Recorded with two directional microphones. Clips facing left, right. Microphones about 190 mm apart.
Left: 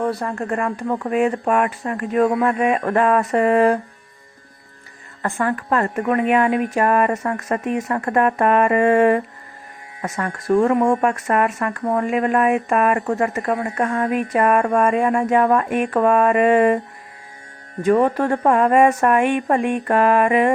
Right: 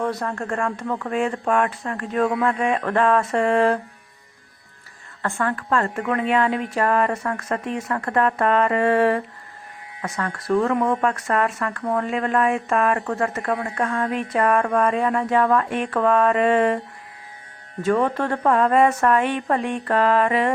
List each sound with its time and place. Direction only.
0.2 s speech: 15° left (ahead or behind)
0.6 s speech: 25° left (ahead or behind)
1.1 s speech: 10° left (ahead or behind)
5.4 s speech: 15° left (ahead or behind)
10.8 s speech: 25° left (ahead or behind)
11.0 s speech: 15° left (ahead or behind)
13.4 s speech: 20° left (ahead or behind)
17.8 s speech: 15° left (ahead or behind)